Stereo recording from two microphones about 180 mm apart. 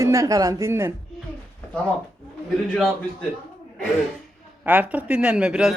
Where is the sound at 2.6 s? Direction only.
Centre (ahead or behind).